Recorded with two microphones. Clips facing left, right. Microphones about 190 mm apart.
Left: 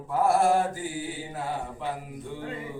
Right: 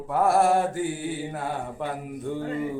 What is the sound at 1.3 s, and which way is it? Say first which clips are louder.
Speech: right 2 dB; 55° right (ahead or behind).